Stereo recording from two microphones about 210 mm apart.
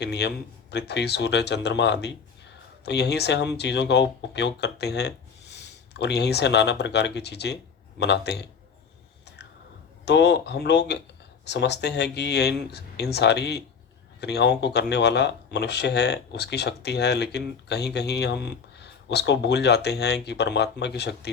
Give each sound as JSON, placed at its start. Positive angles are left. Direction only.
{"t": 0.0, "sound": "speech", "side_deg": 50}
{"t": 10.1, "sound": "speech", "side_deg": 55}